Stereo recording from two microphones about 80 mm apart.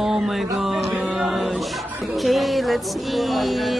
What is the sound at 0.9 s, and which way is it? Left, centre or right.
Mantra, centre.